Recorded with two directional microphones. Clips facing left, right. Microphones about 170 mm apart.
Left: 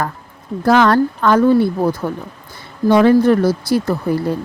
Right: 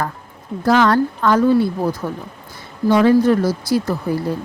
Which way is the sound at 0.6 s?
60° left (ahead or behind).